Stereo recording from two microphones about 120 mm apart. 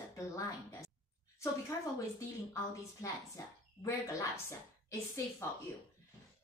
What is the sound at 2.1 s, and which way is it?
A woman's voice, 25° left (ahead or behind).